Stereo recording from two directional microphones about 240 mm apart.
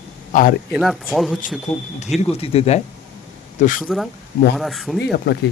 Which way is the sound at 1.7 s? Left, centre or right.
Left.